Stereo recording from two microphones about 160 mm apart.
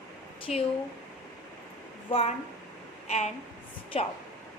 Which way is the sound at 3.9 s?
40° left (ahead or behind).